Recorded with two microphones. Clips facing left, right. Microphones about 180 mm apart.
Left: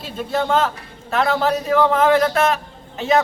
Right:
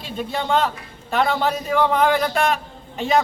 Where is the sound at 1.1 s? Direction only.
Centre (ahead or behind).